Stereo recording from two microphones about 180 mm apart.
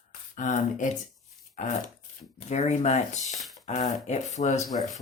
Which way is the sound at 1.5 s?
40° left (ahead or behind).